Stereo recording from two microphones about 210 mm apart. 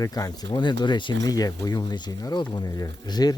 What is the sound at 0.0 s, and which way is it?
Speech, 15° left (ahead or behind).